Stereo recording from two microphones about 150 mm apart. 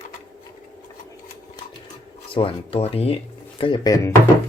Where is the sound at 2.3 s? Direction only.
40° left (ahead or behind).